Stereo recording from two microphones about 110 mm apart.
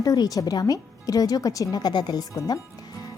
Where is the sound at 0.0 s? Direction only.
30° left (ahead or behind).